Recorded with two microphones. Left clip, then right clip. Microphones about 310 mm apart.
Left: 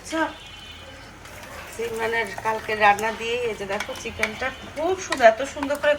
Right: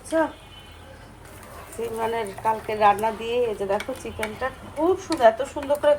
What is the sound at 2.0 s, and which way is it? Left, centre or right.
Speech, centre.